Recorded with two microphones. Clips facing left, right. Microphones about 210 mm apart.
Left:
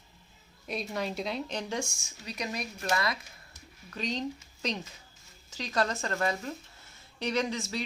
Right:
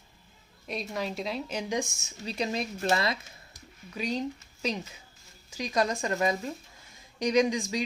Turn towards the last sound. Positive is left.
turn(degrees=-15)  # may be behind; listen again after turning